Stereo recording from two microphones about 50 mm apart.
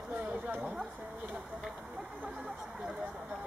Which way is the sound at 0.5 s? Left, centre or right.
Centre.